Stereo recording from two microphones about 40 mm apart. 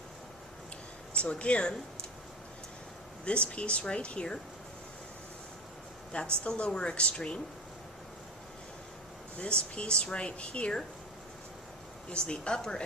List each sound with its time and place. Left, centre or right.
1.1 s speech: left
3.2 s speech: left
6.4 s speech: left
9.4 s speech: left
12.0 s speech: left